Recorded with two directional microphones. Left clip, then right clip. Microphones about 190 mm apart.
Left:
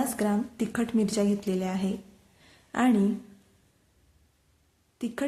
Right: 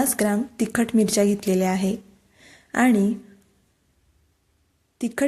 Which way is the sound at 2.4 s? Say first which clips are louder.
Right 6 dB; 30° right (ahead or behind).